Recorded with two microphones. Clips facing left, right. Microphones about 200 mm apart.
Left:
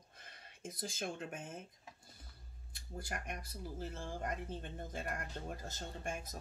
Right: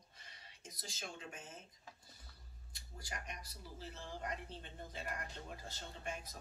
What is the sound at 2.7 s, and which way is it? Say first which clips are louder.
Speech: left 6 dB; 55° left (ahead or behind).